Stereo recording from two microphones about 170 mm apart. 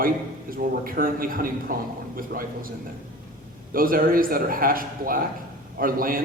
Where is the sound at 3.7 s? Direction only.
55° right (ahead or behind).